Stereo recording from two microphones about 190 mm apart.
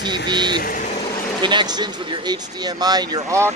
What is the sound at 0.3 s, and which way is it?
Vehicle, 25° right (ahead or behind).